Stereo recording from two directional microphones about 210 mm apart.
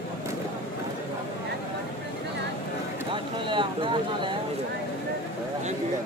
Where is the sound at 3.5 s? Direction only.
25° right (ahead or behind).